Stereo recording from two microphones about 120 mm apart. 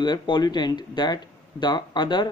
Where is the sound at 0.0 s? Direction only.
40° left (ahead or behind).